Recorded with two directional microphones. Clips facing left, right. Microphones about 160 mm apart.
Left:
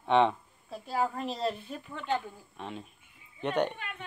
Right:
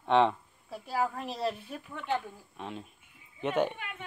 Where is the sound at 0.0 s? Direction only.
Centre (ahead or behind).